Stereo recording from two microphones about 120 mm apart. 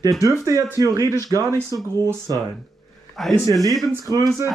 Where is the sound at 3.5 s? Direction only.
30° right (ahead or behind).